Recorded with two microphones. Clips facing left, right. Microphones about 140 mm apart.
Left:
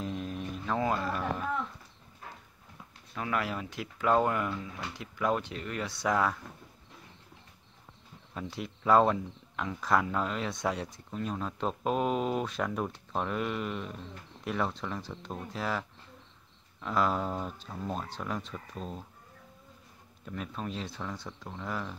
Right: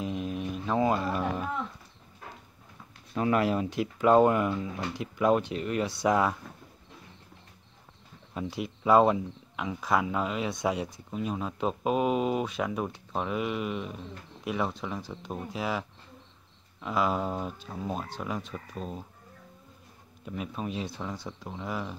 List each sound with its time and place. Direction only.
0.0 s a sound: 10° right (ahead or behind)
3.2 s speech: 25° right (ahead or behind)
8.4 s speech: 10° right (ahead or behind)
16.8 s speech: 5° right (ahead or behind)
20.2 s speech: 10° right (ahead or behind)